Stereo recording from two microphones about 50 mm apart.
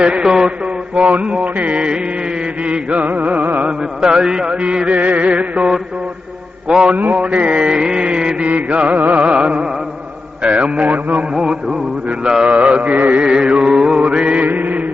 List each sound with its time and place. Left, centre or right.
0.0 s music: centre
1.5 s music: right
3.7 s music: centre
6.9 s music: right
11.3 s mantra: centre
12.2 s music: centre
13.2 s music: centre
13.7 s mantra: centre
14.4 s mantra: right